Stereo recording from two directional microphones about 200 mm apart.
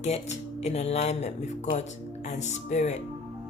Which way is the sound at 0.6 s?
35° left (ahead or behind).